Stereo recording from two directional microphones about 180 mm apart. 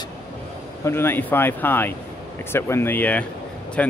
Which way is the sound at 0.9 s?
10° left (ahead or behind).